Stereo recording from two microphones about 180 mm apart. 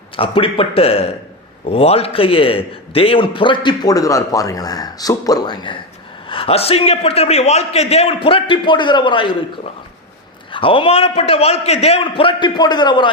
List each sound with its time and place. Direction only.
0.2 s a man's voice: 30° left (ahead or behind)
10.5 s a man's voice: 30° left (ahead or behind)